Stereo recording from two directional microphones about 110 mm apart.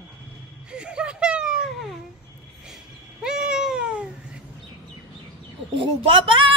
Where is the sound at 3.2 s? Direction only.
5° right (ahead or behind).